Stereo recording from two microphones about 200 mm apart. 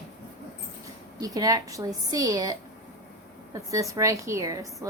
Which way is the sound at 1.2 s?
20° right (ahead or behind).